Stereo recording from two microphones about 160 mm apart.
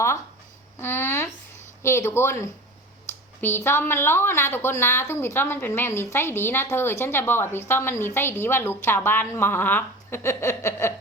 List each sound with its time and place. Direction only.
0.8 s speech: 15° left (ahead or behind)